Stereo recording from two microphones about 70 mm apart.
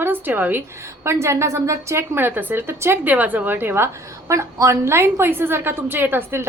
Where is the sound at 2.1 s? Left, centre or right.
Right.